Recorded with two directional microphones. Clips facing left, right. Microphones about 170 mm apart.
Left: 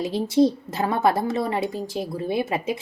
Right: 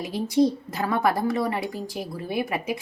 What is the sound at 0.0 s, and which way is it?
A woman's voice, 25° left (ahead or behind).